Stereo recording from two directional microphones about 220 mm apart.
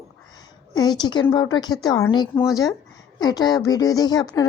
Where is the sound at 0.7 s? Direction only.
20° left (ahead or behind).